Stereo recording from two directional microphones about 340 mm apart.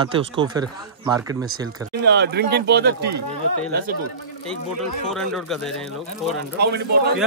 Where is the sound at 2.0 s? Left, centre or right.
Right.